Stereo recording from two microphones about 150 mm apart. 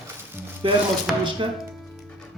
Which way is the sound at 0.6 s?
35° right (ahead or behind).